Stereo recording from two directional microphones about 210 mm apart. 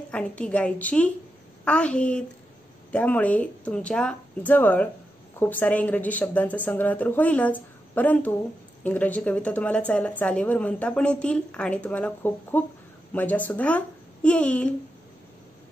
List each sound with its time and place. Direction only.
0.1 s a child's voice: 5° left (ahead or behind)